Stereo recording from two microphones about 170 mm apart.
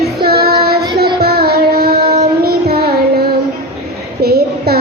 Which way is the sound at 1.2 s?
65° right (ahead or behind).